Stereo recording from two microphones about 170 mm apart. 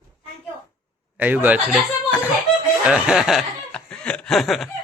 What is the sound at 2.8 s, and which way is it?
Speech, 5° right (ahead or behind).